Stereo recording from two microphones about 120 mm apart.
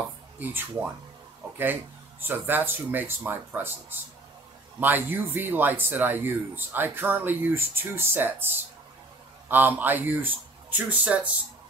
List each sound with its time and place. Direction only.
0.4 s speech: 15° right (ahead or behind)